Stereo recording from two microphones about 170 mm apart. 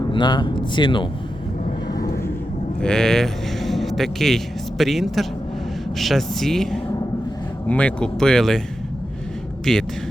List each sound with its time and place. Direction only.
0.1 s speech: 25° left (ahead or behind)
2.8 s speech: 5° left (ahead or behind)
9.7 s speech: 5° left (ahead or behind)